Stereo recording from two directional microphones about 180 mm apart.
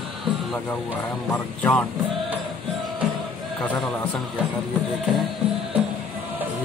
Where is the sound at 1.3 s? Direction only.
10° left (ahead or behind).